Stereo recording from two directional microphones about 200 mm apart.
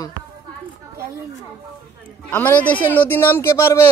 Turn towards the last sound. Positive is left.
turn(degrees=15)  # may be behind; listen again after turning